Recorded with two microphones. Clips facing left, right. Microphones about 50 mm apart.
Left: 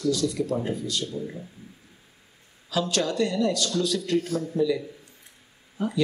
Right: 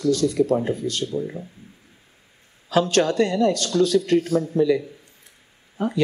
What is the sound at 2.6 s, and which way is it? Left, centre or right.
Speech, right.